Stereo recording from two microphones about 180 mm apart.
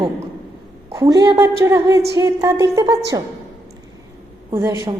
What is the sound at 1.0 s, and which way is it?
A woman's voice, 20° right (ahead or behind).